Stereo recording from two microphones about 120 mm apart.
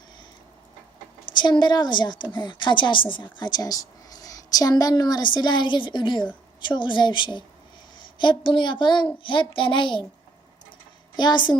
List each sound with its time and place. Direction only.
1.3 s a child's voice: 40° left (ahead or behind)
11.2 s speech: 40° left (ahead or behind)